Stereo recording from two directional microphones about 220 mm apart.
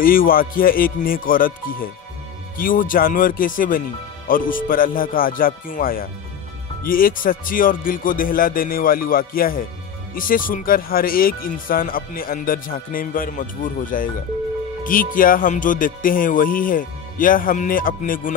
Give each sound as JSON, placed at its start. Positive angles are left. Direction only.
{"t": 0.0, "sound": "speech", "side_deg": 40}